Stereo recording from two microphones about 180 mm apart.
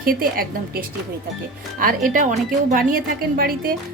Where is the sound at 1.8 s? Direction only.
50° right (ahead or behind).